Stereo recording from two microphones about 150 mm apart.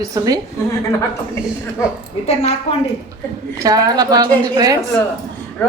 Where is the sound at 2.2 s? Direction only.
45° left (ahead or behind).